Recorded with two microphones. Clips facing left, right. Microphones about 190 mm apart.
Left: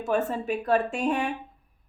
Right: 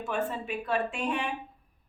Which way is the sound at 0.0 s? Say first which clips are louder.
Left 5 dB; 40° left (ahead or behind).